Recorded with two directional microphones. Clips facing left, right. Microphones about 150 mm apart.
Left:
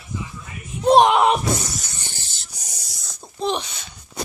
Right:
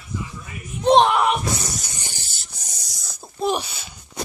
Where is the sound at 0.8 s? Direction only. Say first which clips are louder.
Left 1 dB; 5° left (ahead or behind).